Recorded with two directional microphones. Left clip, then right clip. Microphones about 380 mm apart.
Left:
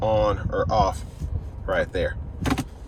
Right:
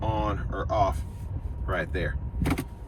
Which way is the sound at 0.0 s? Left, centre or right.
Centre.